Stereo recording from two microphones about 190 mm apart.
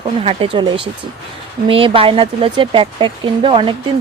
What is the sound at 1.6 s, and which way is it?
Speech, 30° right (ahead or behind).